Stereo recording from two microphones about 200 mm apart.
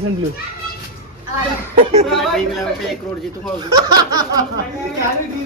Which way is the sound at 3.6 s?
20° right (ahead or behind).